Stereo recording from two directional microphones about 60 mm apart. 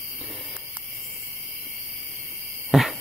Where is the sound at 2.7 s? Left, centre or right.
Centre.